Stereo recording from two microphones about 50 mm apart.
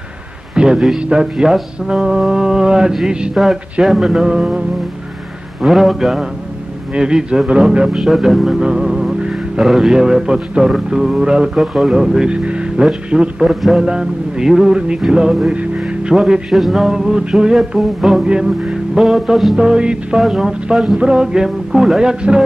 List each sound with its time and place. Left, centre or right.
0.6 s a man's voice: centre
6.9 s speech: centre
13.1 s music: centre
13.5 s speech: centre
13.7 s speech: centre
15.9 s music: right
16.2 s speech: centre
18.2 s music: centre
18.9 s speech: centre
19.5 s speech: centre
20.2 s speech: centre